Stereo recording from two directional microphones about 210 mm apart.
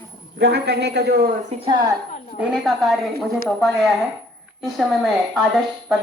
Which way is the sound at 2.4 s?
5° right (ahead or behind).